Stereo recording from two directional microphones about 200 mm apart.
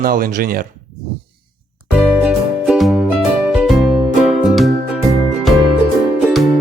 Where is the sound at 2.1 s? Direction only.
5° right (ahead or behind).